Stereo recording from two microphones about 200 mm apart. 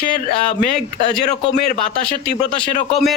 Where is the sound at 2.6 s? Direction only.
25° left (ahead or behind).